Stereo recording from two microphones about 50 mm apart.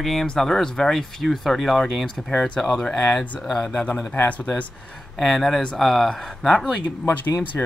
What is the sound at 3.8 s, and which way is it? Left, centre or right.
Speech, left.